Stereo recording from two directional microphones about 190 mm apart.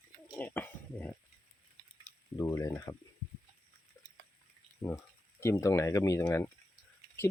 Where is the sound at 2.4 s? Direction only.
15° left (ahead or behind).